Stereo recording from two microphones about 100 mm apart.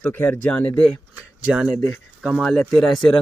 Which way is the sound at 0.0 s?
15° left (ahead or behind).